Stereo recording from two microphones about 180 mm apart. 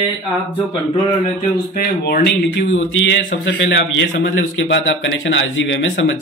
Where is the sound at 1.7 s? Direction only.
55° left (ahead or behind).